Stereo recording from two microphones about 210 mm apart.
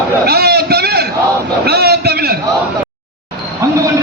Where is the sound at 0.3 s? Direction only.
50° right (ahead or behind).